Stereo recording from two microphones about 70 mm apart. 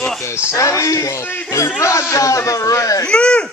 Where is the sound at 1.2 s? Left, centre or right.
Left.